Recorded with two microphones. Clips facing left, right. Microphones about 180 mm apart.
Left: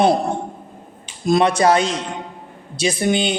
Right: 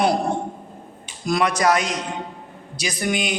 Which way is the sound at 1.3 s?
25° left (ahead or behind).